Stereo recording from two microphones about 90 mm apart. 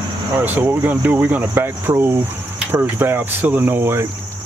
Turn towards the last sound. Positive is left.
turn(degrees=-25)  # may be behind; listen again after turning